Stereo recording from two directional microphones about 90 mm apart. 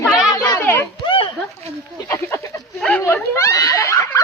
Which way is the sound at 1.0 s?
80° left.